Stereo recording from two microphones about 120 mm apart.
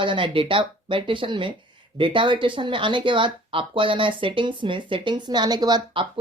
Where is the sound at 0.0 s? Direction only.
45° right (ahead or behind).